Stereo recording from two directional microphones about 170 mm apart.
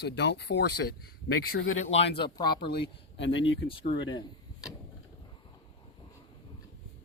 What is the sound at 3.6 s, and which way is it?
Speech, 30° left (ahead or behind).